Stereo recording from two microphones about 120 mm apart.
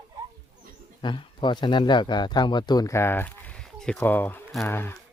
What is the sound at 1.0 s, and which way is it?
Speech, 40° left (ahead or behind).